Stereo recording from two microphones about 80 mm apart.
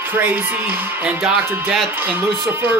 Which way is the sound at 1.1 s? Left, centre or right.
Centre.